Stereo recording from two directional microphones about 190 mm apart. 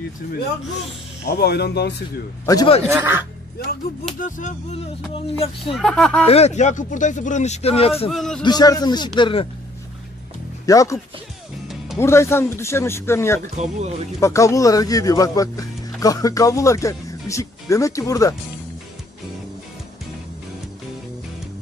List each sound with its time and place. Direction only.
1.4 s speech: 60° left (ahead or behind)
2.4 s speech: 20° left (ahead or behind)
2.9 s speech: 10° right (ahead or behind)
4.2 s speech: 40° left (ahead or behind)
5.8 s speech: centre (ahead or behind)
6.2 s speech: 35° left (ahead or behind)
8.1 s speech: centre (ahead or behind)
8.5 s speech: 20° left (ahead or behind)
10.6 s speech: 20° left (ahead or behind)
12.0 s speech: 15° left (ahead or behind)
13.6 s speech: 35° right (ahead or behind)
14.2 s speech: 15° left (ahead or behind)